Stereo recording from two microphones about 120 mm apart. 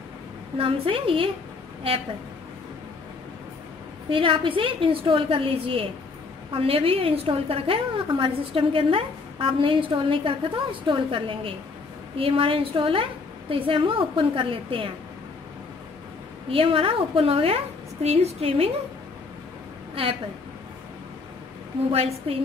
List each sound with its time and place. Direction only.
0.6 s a woman's voice: 50° right (ahead or behind)
4.1 s a woman's voice: 45° right (ahead or behind)
16.4 s a woman's voice: 50° right (ahead or behind)